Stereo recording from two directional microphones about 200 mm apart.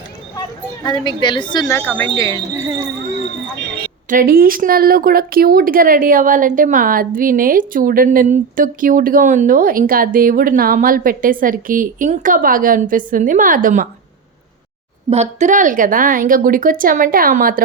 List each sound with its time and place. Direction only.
0.9 s a woman's voice: 20° left (ahead or behind)
4.1 s a woman's voice: 45° right (ahead or behind)
15.1 s a woman's voice: 35° right (ahead or behind)